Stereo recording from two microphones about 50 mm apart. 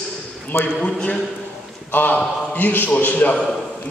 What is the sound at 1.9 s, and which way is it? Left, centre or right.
A man's voice, left.